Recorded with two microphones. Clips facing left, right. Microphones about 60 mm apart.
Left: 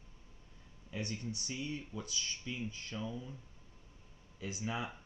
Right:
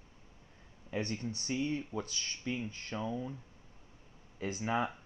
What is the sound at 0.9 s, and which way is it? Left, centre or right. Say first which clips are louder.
Speech: right 4 dB; right.